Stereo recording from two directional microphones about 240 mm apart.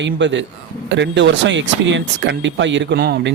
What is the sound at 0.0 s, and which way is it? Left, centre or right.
Speech, right.